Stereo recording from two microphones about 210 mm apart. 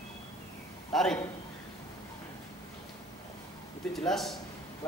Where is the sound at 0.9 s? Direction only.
5° left (ahead or behind).